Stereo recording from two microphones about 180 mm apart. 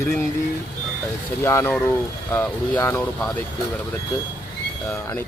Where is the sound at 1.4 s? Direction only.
10° left (ahead or behind).